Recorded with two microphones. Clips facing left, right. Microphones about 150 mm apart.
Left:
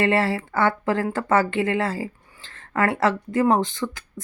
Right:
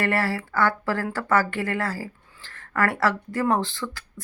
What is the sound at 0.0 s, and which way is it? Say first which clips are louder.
Speech: left 4 dB; 20° left (ahead or behind).